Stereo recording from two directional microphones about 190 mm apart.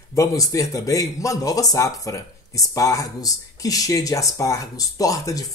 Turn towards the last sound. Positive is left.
turn(degrees=20)  # may be behind; listen again after turning